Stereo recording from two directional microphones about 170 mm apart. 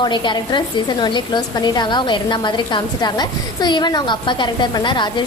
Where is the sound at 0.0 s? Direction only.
25° left (ahead or behind).